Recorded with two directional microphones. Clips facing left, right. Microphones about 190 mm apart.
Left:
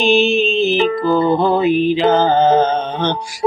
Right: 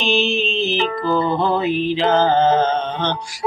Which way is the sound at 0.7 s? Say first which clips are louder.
Left 5 dB; 40° left (ahead or behind).